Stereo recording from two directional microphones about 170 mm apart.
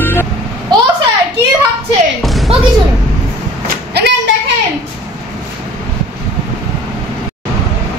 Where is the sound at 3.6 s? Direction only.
70° right (ahead or behind).